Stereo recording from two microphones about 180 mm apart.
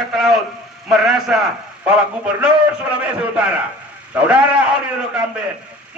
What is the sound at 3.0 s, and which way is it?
A man's voice, 5° right (ahead or behind).